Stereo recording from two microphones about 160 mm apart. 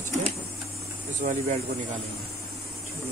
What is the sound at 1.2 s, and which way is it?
Speech, 40° right (ahead or behind).